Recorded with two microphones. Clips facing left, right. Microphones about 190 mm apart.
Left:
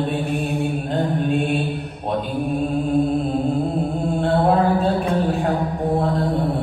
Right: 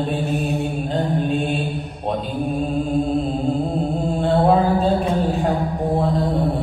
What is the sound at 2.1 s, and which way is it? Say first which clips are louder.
Mantra: left 4 dB; 55° left (ahead or behind).